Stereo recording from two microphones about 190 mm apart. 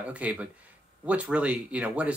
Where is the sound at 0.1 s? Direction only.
5° right (ahead or behind).